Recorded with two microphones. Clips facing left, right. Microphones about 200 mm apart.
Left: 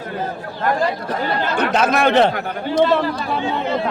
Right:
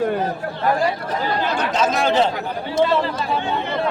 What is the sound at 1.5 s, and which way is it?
Speech, 60° left (ahead or behind).